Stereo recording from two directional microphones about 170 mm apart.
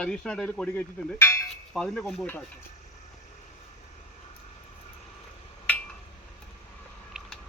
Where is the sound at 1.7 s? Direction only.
5° left (ahead or behind).